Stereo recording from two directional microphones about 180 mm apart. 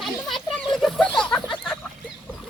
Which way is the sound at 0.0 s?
Centre (ahead or behind).